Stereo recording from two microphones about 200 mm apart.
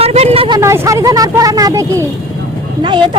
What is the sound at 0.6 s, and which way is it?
A woman's voice, 15° right (ahead or behind).